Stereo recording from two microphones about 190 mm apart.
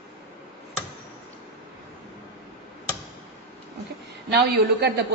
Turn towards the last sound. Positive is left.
turn(degrees=-60)  # may be behind; listen again after turning